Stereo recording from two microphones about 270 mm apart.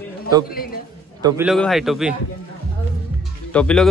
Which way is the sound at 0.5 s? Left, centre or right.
Left.